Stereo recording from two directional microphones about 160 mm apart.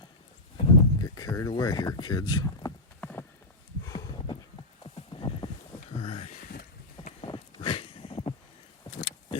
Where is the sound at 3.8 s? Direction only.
25° left (ahead or behind).